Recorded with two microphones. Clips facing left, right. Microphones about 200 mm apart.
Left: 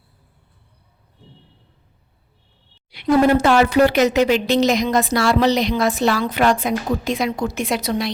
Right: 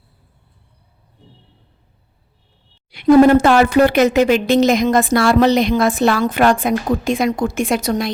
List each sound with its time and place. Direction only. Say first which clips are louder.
2.9 s speech: right 6 dB; 50° right (ahead or behind)